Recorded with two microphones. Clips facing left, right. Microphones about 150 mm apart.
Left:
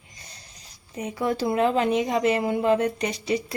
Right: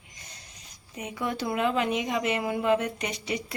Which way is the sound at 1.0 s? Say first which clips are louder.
Left 6 dB; 35° left (ahead or behind).